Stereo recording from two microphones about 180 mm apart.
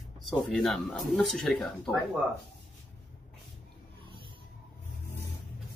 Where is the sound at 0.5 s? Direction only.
Centre (ahead or behind).